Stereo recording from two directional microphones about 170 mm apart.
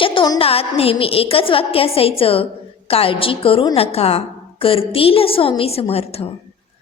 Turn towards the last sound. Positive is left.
turn(degrees=35)  # may be behind; listen again after turning